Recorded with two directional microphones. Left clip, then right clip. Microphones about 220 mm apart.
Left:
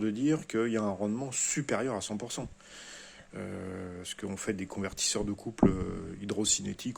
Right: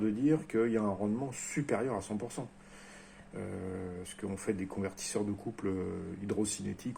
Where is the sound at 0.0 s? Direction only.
40° left (ahead or behind).